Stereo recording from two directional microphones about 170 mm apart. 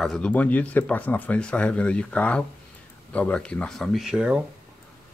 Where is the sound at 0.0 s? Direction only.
5° left (ahead or behind).